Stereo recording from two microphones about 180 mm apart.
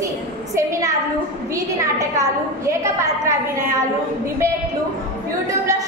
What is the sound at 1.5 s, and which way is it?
A woman's voice, 15° right (ahead or behind).